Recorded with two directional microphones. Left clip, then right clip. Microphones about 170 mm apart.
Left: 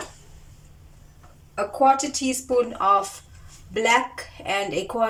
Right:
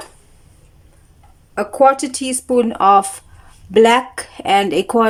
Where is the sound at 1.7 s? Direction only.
65° right (ahead or behind).